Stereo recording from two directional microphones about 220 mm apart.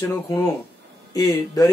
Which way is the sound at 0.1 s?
15° left (ahead or behind).